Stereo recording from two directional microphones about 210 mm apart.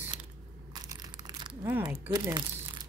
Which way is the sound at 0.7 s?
20° right (ahead or behind).